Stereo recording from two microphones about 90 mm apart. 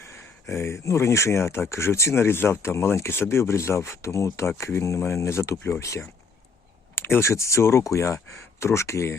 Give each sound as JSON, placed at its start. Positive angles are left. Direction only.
{"t": 0.4, "sound": "speech", "side_deg": 30}